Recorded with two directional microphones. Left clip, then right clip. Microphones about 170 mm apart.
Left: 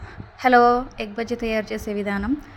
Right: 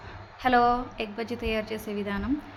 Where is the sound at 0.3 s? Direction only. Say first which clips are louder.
Left 7 dB; 35° left (ahead or behind).